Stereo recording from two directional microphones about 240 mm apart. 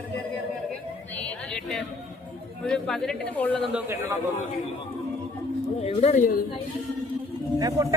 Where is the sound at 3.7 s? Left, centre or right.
Centre.